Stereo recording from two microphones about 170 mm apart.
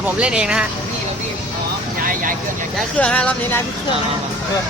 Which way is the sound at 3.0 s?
10° left (ahead or behind).